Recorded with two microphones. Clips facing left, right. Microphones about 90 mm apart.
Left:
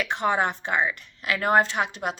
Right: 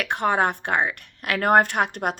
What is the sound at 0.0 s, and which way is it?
Speech, 55° right (ahead or behind).